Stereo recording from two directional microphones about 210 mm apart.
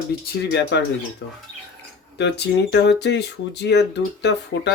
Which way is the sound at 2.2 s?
55° left (ahead or behind).